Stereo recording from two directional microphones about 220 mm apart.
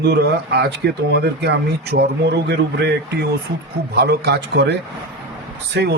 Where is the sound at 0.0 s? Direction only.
50° right (ahead or behind).